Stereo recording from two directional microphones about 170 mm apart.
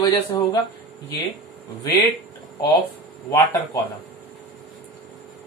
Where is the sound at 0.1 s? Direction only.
30° left (ahead or behind).